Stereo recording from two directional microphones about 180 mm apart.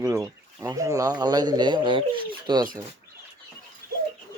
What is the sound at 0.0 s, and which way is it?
Speech, 20° right (ahead or behind).